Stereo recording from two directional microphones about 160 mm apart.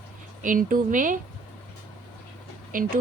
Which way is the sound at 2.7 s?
60° right (ahead or behind).